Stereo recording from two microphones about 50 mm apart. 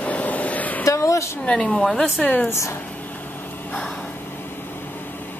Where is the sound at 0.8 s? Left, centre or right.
Left.